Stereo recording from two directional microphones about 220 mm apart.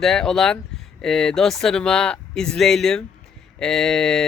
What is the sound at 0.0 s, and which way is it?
Speech, centre (ahead or behind).